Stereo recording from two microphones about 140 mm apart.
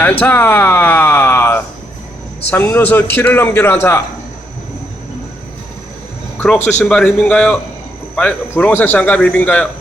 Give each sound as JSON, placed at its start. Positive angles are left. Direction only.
{"t": 0.0, "sound": "a man's voice", "side_deg": 15}
{"t": 6.7, "sound": "a man's voice", "side_deg": 10}